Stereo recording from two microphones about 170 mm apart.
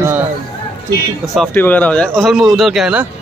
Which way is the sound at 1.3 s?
10° left (ahead or behind).